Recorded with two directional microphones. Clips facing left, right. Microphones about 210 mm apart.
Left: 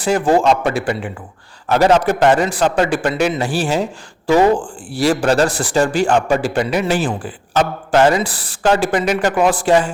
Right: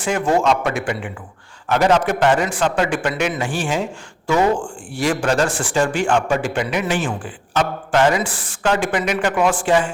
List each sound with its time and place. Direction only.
0.0 s speech: 35° left (ahead or behind)